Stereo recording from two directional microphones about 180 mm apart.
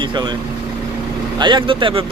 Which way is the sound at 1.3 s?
25° right (ahead or behind).